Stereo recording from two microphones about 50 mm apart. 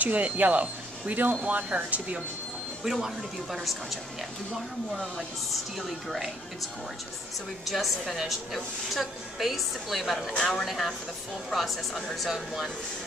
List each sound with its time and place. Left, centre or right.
0.0 s speech: right
2.8 s a woman's voice: centre
5.8 s a woman's voice: centre
7.6 s a woman's voice: centre